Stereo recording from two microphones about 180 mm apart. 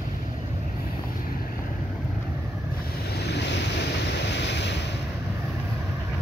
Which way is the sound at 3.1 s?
65° left (ahead or behind).